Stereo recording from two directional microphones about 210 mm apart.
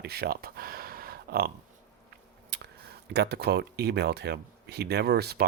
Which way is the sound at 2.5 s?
55° right (ahead or behind).